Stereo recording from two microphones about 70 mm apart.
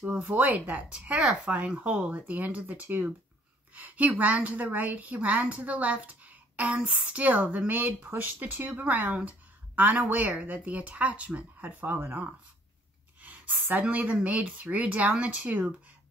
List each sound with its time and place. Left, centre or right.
0.0 s a woman's voice: right
13.2 s a woman's voice: right